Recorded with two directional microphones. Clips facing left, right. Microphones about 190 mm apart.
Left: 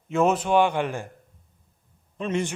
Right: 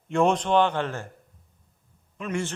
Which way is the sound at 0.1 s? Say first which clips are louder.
Left 1 dB; 5° left (ahead or behind).